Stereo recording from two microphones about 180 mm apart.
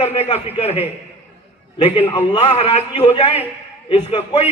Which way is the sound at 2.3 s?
35° left (ahead or behind).